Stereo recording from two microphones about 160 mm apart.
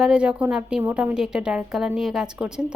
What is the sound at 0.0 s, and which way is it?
A woman's voice, 5° right (ahead or behind).